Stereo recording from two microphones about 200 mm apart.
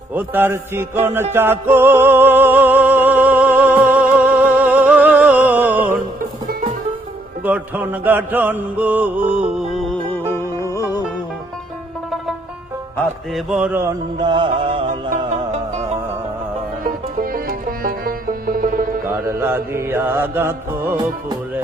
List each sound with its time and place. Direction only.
0.1 s music: 10° right (ahead or behind)
7.4 s music: 10° right (ahead or behind)
10.3 s music: 15° left (ahead or behind)
13.0 s music: centre (ahead or behind)
14.2 s music: 25° right (ahead or behind)
17.3 s music: 45° right (ahead or behind)
19.2 s music: 10° right (ahead or behind)